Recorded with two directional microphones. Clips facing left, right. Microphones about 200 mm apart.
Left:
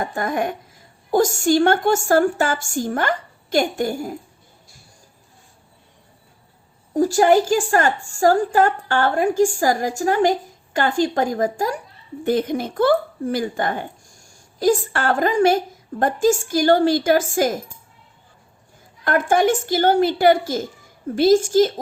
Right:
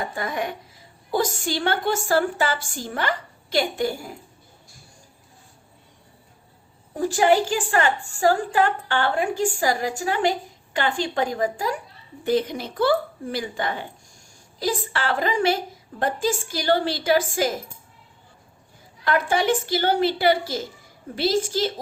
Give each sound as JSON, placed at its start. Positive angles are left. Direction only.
{"t": 0.0, "sound": "a woman's voice", "side_deg": 50}
{"t": 6.9, "sound": "a woman's voice", "side_deg": 40}
{"t": 19.0, "sound": "a woman's voice", "side_deg": 50}